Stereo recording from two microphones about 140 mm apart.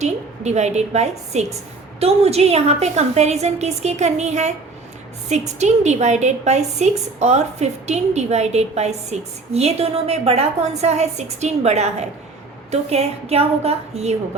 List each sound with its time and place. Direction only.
0.0 s a woman's voice: 55° right (ahead or behind)